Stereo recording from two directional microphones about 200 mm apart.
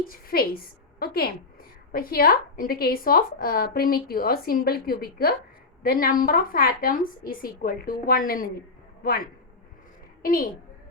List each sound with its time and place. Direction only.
0.1 s a woman's voice: 50° left (ahead or behind)